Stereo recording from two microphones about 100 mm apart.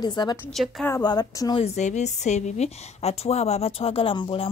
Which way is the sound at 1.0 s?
45° left (ahead or behind).